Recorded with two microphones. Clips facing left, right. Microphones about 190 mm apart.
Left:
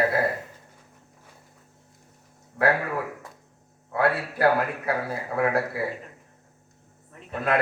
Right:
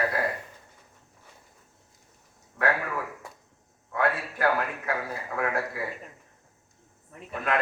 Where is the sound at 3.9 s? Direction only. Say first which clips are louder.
Left 3 dB; 35° left (ahead or behind).